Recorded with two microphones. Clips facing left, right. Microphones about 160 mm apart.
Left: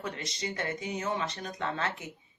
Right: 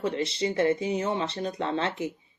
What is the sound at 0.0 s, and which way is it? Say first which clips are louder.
A woman's voice: right 9 dB; 30° right (ahead or behind).